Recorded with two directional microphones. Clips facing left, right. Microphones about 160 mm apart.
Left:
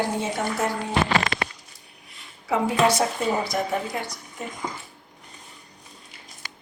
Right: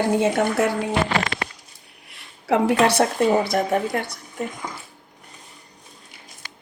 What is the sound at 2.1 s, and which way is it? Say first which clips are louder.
A woman's voice: right 5 dB; 65° right (ahead or behind).